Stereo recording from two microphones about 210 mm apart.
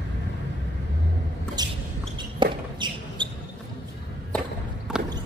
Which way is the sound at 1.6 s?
20° right (ahead or behind).